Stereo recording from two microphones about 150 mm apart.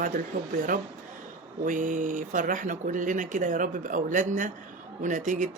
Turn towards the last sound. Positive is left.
turn(degrees=-60)  # may be behind; listen again after turning